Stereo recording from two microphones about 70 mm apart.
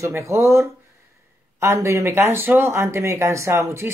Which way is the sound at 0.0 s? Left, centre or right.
Right.